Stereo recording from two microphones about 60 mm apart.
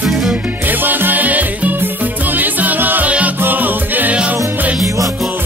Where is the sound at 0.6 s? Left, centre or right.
Right.